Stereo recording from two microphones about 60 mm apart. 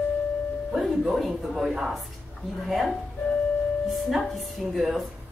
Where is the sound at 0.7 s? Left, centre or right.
Centre.